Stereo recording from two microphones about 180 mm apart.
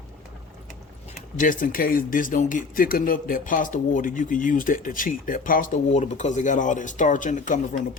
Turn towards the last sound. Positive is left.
turn(degrees=45)  # may be behind; listen again after turning